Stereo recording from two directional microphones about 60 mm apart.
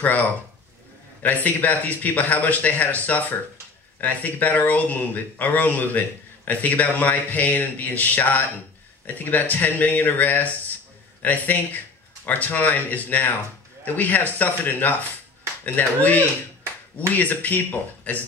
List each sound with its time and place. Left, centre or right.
1.2 s speech: left